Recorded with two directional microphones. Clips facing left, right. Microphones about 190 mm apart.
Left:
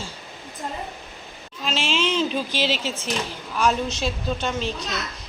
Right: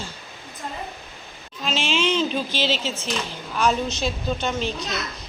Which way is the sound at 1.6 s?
Centre (ahead or behind).